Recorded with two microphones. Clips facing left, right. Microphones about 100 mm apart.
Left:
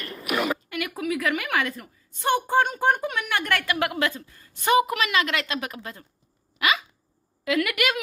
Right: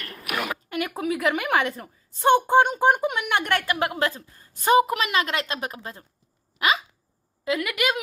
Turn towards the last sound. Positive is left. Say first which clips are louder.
# left 1 dB
turn(degrees=-20)  # may be behind; listen again after turning